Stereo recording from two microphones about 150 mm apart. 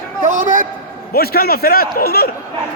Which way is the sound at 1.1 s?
90° left.